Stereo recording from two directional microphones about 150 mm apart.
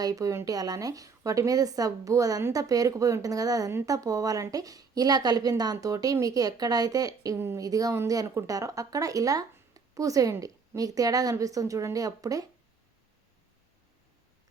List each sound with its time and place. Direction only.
0.0 s speech: 25° right (ahead or behind)